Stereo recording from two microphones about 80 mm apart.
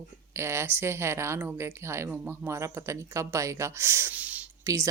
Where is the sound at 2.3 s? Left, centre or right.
Right.